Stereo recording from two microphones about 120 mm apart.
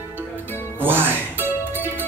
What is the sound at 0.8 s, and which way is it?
Music, 15° right (ahead or behind).